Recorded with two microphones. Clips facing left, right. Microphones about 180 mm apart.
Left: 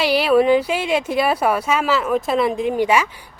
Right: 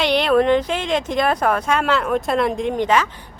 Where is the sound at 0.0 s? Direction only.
5° left (ahead or behind).